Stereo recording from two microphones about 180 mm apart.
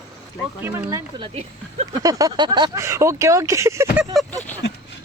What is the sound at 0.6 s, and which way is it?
Speech, 15° right (ahead or behind).